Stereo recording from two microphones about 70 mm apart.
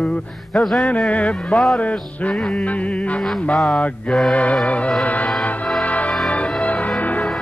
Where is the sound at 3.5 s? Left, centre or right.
Centre.